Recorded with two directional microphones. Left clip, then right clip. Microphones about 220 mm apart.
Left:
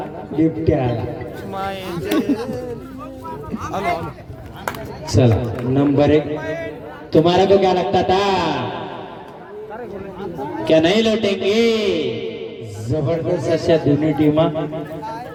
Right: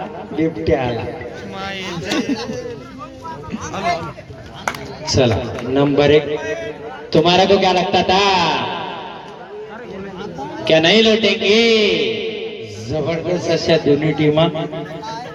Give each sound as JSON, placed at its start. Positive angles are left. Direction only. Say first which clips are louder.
{"t": 0.3, "sound": "speech", "louder": "even", "side_deg": -25}
{"t": 1.5, "sound": "a sound", "louder": "left 2 dB", "side_deg": 50}
{"t": 4.6, "sound": "a man's voice", "louder": "right 3 dB", "side_deg": -30}
{"t": 10.6, "sound": "a man's voice", "louder": "right 3 dB", "side_deg": -35}